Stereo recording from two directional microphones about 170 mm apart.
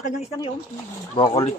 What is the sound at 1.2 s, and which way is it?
Speech, 30° left (ahead or behind).